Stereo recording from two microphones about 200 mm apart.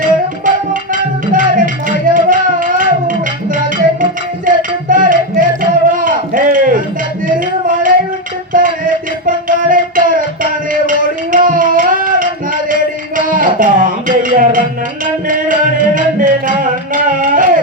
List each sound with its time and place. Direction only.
0.0 s music: 40° right (ahead or behind)
5.9 s a sound: 45° right (ahead or behind)
10.7 s music: 40° right (ahead or behind)